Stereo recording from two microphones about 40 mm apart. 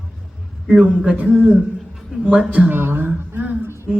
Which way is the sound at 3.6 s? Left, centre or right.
Right.